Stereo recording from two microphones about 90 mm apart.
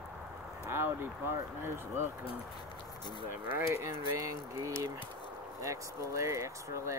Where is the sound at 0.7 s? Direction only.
25° right (ahead or behind).